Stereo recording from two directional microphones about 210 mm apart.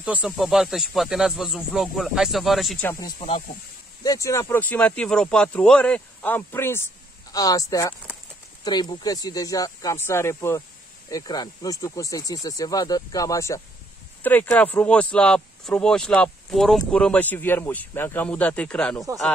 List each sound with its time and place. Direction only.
0.0 s speech: 5° right (ahead or behind)
4.0 s speech: 15° left (ahead or behind)